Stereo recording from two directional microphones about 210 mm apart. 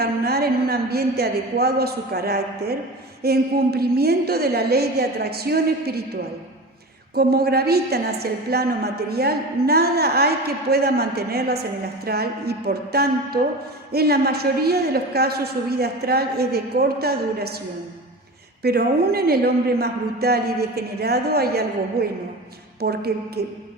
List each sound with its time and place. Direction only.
0.0 s a woman's voice: 50° right (ahead or behind)
7.2 s a woman's voice: 50° right (ahead or behind)
18.6 s a woman's voice: 50° right (ahead or behind)